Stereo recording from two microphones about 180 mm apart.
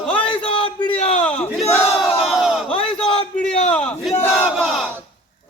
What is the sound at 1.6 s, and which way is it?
Battle cry, 15° left (ahead or behind).